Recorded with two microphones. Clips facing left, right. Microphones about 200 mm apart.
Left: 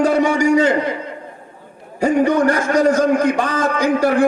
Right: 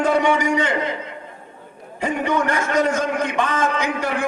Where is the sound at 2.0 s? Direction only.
35° left (ahead or behind).